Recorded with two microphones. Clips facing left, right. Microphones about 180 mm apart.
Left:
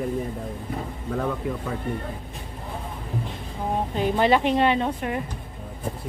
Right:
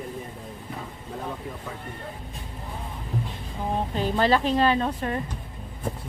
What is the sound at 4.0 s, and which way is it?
A woman's voice, 15° left (ahead or behind).